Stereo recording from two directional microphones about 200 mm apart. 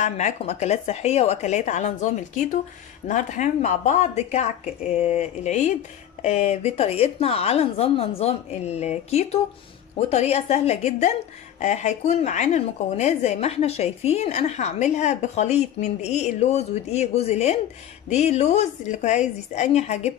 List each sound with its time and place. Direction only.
0.0 s a woman's voice: 35° left (ahead or behind)